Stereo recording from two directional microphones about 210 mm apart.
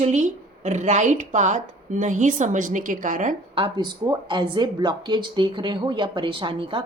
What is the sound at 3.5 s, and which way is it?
Speech, 25° right (ahead or behind).